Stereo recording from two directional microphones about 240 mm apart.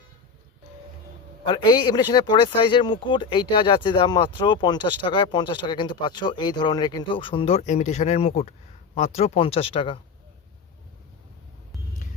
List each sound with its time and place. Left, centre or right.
1.5 s speech: left